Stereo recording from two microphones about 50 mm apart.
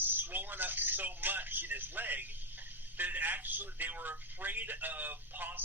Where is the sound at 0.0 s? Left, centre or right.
Right.